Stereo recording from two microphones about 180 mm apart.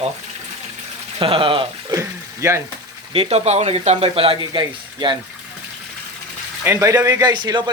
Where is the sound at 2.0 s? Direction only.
15° right (ahead or behind).